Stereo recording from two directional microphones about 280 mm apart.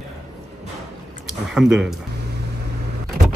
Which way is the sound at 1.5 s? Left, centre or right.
Centre.